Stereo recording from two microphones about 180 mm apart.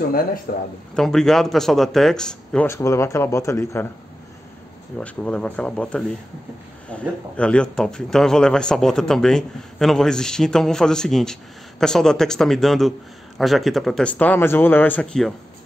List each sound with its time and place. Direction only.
0.5 s speech: 55° left (ahead or behind)
0.9 s speech: 5° left (ahead or behind)
4.9 s speech: 5° left (ahead or behind)